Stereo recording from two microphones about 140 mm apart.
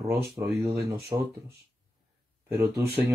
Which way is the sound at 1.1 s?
40° right (ahead or behind).